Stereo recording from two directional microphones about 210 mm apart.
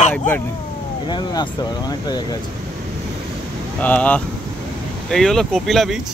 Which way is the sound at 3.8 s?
5° left (ahead or behind).